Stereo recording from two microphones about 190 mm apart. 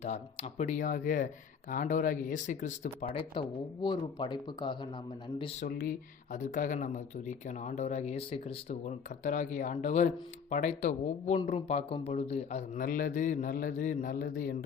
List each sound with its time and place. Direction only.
0.0 s a man's voice: 35° left (ahead or behind)
3.3 s speech: 25° left (ahead or behind)
5.6 s a man's voice: 50° left (ahead or behind)